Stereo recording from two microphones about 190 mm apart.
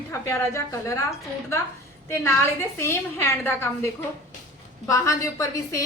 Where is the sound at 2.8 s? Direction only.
15° left (ahead or behind).